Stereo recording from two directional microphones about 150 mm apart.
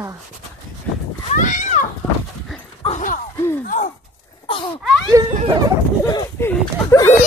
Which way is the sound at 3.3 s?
15° left (ahead or behind).